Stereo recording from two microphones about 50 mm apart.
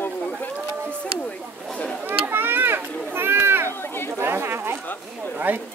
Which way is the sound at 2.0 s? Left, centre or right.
Right.